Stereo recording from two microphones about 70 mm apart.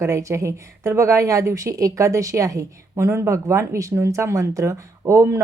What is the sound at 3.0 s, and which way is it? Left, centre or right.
A woman's voice, right.